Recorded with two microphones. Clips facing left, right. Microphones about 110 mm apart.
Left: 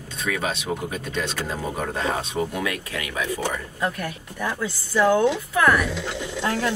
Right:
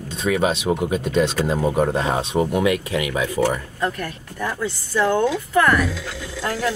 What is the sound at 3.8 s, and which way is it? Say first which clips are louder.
Speech: right 1 dB; 5° left (ahead or behind).